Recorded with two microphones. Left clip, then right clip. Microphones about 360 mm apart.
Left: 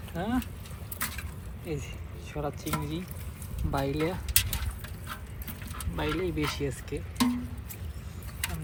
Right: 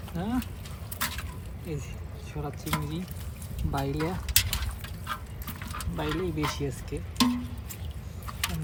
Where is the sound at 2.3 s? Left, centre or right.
Centre.